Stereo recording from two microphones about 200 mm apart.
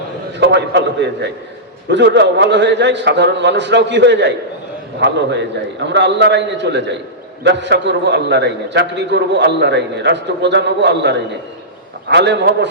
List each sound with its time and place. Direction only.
0.3 s a man's voice: 60° right (ahead or behind)